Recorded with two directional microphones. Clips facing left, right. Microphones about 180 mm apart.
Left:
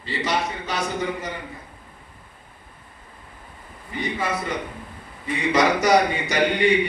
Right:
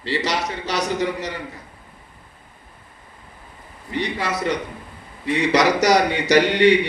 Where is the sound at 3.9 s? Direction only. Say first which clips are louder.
Right 2 dB; 75° right (ahead or behind).